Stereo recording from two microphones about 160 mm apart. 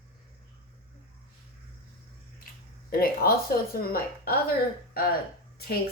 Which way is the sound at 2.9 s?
70° left (ahead or behind).